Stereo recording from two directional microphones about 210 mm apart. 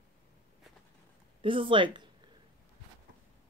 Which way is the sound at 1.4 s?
25° right (ahead or behind).